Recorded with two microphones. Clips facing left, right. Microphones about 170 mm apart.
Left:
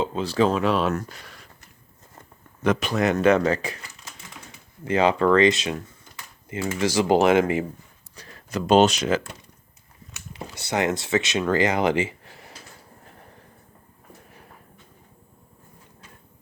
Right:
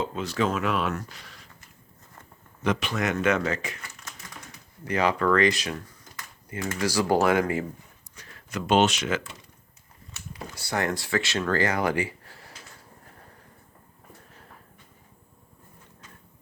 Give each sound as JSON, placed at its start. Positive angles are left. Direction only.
{"t": 0.0, "sound": "speech", "side_deg": 30}
{"t": 0.9, "sound": "speech", "side_deg": 50}
{"t": 2.6, "sound": "speech", "side_deg": 40}
{"t": 4.9, "sound": "speech", "side_deg": 25}
{"t": 8.1, "sound": "speech", "side_deg": 35}
{"t": 10.3, "sound": "speech", "side_deg": 20}